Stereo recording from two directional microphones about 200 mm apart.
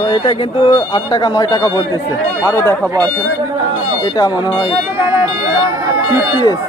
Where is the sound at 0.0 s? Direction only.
25° left (ahead or behind).